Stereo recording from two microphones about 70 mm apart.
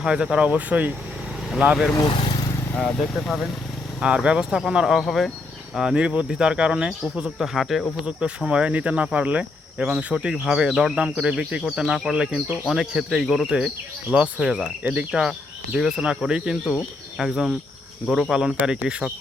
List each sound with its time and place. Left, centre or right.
0.0 s speech: centre
2.7 s speech: centre
4.0 s speech: centre
5.7 s speech: centre